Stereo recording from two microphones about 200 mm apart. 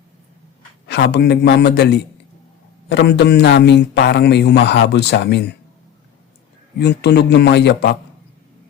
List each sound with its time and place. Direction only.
0.9 s a man's voice: 60° left (ahead or behind)
6.7 s a man's voice: 55° left (ahead or behind)